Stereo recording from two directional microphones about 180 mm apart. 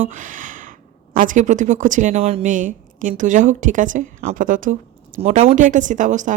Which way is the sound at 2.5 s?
45° right (ahead or behind).